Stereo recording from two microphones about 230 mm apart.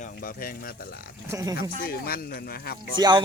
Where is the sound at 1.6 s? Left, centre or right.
Left.